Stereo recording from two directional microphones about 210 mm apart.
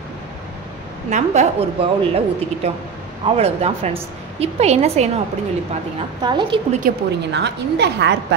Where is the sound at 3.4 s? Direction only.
30° right (ahead or behind).